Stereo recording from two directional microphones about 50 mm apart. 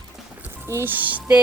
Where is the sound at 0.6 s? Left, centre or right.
Right.